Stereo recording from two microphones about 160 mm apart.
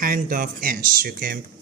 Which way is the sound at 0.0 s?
60° right (ahead or behind).